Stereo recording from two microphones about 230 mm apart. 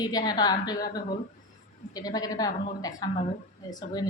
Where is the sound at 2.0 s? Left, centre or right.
Centre.